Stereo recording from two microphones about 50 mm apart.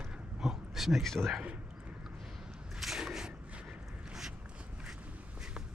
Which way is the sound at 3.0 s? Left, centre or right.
Centre.